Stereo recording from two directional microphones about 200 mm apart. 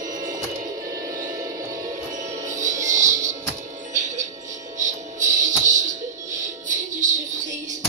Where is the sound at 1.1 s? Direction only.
40° right (ahead or behind).